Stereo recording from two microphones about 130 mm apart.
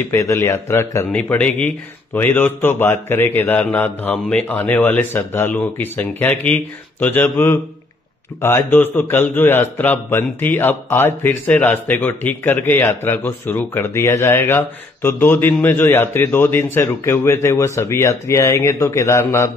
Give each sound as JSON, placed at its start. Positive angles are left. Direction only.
{"t": 0.1, "sound": "speech", "side_deg": 25}
{"t": 1.1, "sound": "a man's voice", "side_deg": 10}